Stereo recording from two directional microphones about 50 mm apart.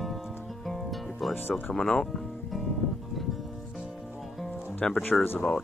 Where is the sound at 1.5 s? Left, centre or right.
Centre.